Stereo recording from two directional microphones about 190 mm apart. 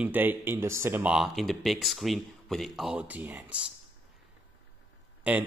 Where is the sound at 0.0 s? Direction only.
10° right (ahead or behind).